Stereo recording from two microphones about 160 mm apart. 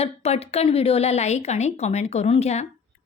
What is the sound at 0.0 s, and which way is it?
A woman's voice, 40° left (ahead or behind).